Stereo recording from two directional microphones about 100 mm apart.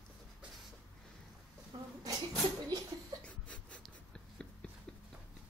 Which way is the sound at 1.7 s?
55° right (ahead or behind).